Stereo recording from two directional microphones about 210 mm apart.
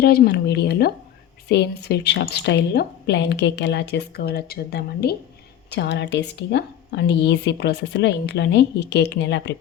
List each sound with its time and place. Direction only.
0.0 s speech: 50° left (ahead or behind)